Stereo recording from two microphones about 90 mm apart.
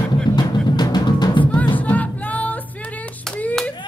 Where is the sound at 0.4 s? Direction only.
50° left (ahead or behind).